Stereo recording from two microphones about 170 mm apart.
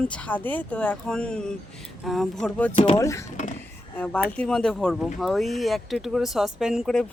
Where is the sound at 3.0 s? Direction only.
15° left (ahead or behind).